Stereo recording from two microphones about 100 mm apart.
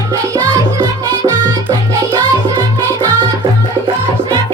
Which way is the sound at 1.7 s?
40° right (ahead or behind).